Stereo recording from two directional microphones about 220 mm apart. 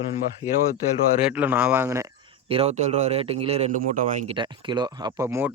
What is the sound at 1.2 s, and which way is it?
Speech, 10° right (ahead or behind).